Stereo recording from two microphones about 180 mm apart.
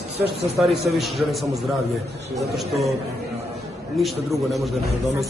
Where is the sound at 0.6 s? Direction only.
Centre (ahead or behind).